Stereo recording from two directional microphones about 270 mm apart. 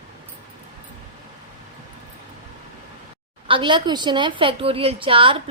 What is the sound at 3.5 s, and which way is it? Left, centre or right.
A woman's voice, centre.